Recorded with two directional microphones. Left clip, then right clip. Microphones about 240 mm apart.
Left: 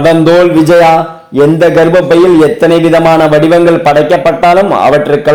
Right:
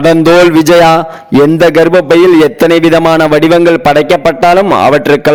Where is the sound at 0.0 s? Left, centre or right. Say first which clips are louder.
Right 1 dB; right.